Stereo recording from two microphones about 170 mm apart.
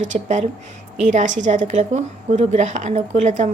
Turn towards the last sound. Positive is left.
turn(degrees=-45)  # may be behind; listen again after turning